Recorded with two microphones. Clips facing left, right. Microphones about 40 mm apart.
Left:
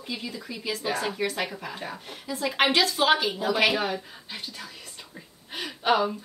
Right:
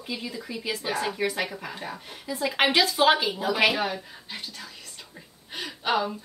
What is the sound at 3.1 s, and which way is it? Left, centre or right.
Speech, centre.